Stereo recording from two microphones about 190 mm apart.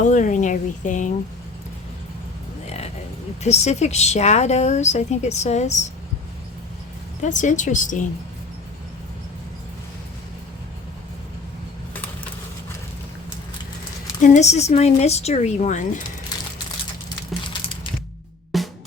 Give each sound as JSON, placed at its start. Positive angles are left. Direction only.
{"t": 0.0, "sound": "speech", "side_deg": 40}
{"t": 2.6, "sound": "a sound", "side_deg": 35}
{"t": 3.4, "sound": "a woman's voice", "side_deg": 35}
{"t": 7.2, "sound": "a woman's voice", "side_deg": 40}
{"t": 14.2, "sound": "a woman's voice", "side_deg": 40}
{"t": 18.5, "sound": "music", "side_deg": 0}